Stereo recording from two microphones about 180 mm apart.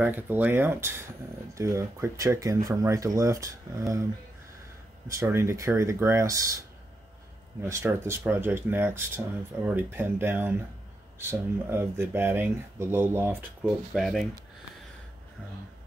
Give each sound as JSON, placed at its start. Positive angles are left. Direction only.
{"t": 0.0, "sound": "speech", "side_deg": -10}
{"t": 5.0, "sound": "speech", "side_deg": -15}
{"t": 7.6, "sound": "speech", "side_deg": -15}